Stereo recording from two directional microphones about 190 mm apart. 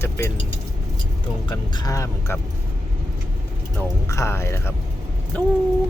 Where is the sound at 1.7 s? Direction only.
20° left (ahead or behind).